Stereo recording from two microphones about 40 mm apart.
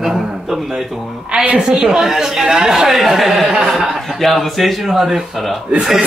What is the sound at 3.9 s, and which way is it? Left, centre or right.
Speech, centre.